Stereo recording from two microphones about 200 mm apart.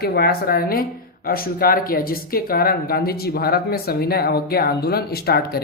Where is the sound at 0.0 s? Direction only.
50° left (ahead or behind).